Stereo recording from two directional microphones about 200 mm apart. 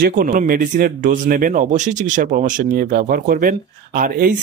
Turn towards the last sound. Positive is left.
turn(degrees=-45)  # may be behind; listen again after turning